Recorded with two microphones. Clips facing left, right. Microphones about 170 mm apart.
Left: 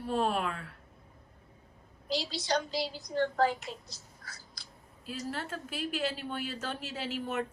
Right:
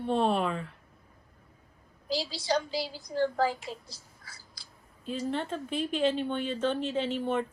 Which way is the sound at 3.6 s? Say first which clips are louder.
Right 2 dB; 30° right (ahead or behind).